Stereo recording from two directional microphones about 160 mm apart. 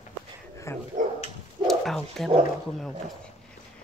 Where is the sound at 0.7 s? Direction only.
15° left (ahead or behind).